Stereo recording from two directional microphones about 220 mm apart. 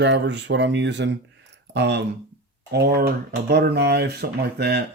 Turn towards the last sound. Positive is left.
turn(degrees=-45)  # may be behind; listen again after turning